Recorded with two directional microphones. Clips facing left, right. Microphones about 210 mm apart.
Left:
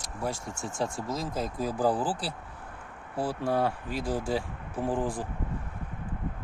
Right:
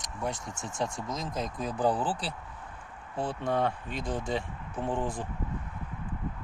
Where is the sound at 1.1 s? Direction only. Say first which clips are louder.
Left 2 dB; 5° left (ahead or behind).